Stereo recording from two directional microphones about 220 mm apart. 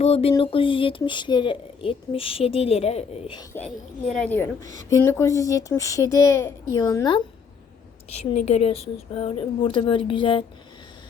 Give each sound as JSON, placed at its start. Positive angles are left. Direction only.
{"t": 0.0, "sound": "speech", "side_deg": 30}
{"t": 4.0, "sound": "a child's voice", "side_deg": 0}
{"t": 8.1, "sound": "speech", "side_deg": 30}